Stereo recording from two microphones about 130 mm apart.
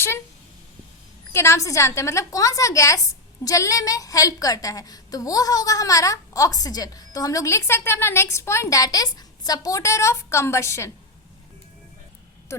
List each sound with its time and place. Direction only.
1.3 s a woman's voice: 20° left (ahead or behind)
12.5 s speech: 20° left (ahead or behind)